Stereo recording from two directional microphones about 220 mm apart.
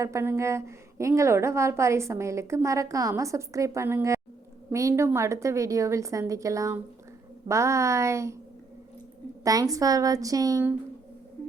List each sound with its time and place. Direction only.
0.0 s a woman's voice: 10° right (ahead or behind)
9.4 s a woman's voice: 15° right (ahead or behind)